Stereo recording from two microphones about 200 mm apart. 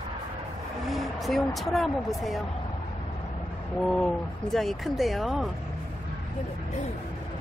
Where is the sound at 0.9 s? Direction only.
Centre (ahead or behind).